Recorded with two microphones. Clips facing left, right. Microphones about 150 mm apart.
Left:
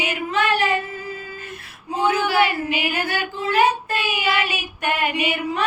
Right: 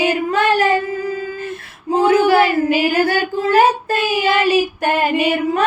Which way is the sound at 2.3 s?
40° right (ahead or behind).